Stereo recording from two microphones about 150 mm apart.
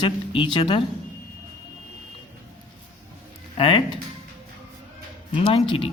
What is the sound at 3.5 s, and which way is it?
Speech, 35° left (ahead or behind).